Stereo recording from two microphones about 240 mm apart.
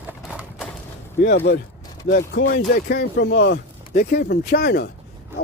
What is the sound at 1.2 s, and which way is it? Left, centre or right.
Speech, left.